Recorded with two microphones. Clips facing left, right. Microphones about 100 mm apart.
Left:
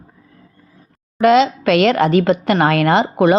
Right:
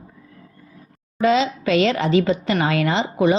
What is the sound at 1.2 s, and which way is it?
A woman's voice, 70° left (ahead or behind).